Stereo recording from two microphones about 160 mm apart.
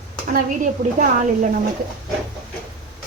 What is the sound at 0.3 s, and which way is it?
A woman's voice, 55° right (ahead or behind).